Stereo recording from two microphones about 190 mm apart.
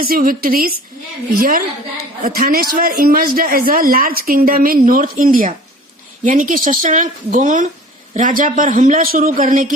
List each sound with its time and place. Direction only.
0.0 s a man's voice: 50° right (ahead or behind)